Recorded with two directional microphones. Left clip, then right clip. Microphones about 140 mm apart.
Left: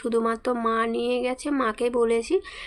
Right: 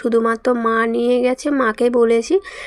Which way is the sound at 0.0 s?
40° right (ahead or behind).